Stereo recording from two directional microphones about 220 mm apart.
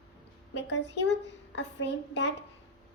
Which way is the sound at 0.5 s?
55° left (ahead or behind).